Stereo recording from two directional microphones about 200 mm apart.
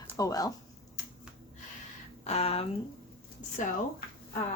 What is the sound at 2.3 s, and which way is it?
Speech, 30° left (ahead or behind).